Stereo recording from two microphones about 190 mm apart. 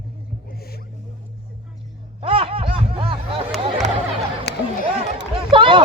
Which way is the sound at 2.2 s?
30° right (ahead or behind).